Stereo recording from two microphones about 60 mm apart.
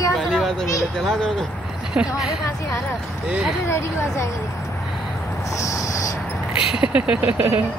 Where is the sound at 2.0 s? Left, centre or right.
Centre.